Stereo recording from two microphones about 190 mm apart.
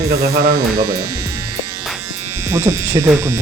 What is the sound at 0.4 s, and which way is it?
Speech, 55° right (ahead or behind).